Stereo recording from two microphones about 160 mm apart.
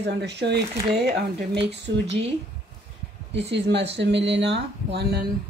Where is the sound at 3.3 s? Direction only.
90° right.